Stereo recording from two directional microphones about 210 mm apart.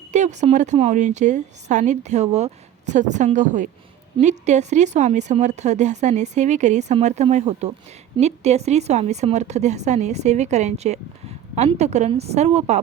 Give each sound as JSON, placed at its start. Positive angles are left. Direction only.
{"t": 0.1, "sound": "a woman's voice", "side_deg": -35}